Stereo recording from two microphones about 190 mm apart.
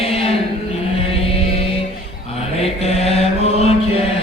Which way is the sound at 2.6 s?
35° left (ahead or behind).